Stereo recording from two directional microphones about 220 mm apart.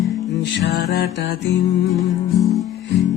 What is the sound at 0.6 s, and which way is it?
Music, 45° left (ahead or behind).